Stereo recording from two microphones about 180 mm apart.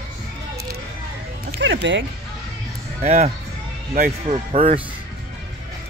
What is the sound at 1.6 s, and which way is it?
Speech, 90° right.